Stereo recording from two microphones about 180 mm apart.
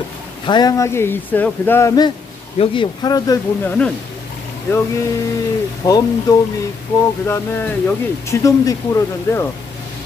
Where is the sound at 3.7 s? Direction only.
5° left (ahead or behind).